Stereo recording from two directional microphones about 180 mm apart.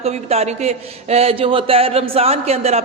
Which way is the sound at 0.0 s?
35° right (ahead or behind).